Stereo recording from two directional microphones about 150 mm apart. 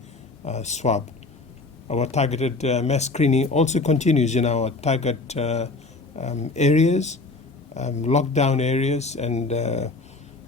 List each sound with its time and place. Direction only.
0.4 s speech: 50° left (ahead or behind)